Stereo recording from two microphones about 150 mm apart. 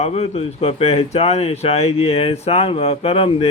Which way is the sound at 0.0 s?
45° left (ahead or behind).